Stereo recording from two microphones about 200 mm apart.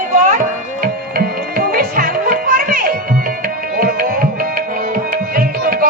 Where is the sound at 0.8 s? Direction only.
50° right (ahead or behind).